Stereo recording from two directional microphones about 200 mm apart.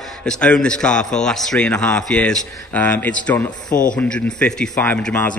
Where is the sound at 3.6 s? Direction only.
40° left (ahead or behind).